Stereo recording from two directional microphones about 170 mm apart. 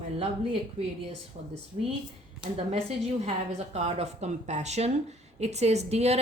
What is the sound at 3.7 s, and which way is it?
A woman's voice, 40° right (ahead or behind).